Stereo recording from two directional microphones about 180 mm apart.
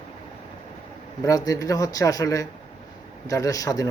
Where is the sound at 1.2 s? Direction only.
20° left (ahead or behind).